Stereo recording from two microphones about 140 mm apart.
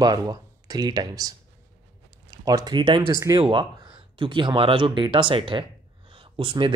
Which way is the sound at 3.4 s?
35° right (ahead or behind).